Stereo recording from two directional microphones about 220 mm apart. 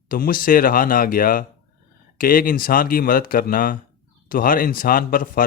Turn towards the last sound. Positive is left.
turn(degrees=40)  # may be behind; listen again after turning